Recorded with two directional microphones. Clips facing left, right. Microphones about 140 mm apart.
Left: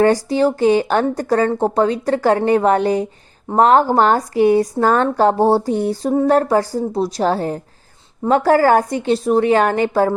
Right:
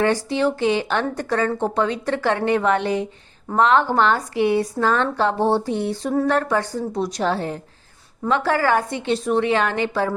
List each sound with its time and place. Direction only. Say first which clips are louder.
0.0 s a woman's voice: left 5 dB; 40° left (ahead or behind)